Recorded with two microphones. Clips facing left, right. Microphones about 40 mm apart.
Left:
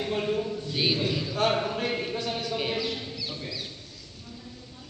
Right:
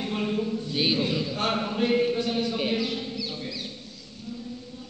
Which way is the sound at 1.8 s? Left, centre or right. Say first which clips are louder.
Right 6 dB; centre.